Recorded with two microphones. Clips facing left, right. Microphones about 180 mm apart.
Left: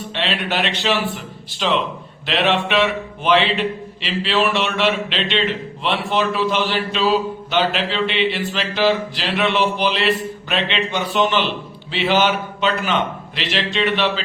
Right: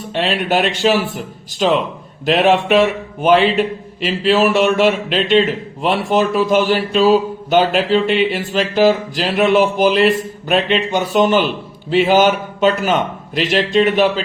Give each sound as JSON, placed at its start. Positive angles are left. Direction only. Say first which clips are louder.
{"t": 0.1, "sound": "speech", "louder": "right 7 dB", "side_deg": -45}